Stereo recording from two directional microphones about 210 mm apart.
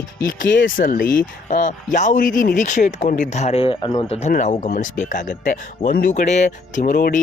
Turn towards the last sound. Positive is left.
turn(degrees=40)  # may be behind; listen again after turning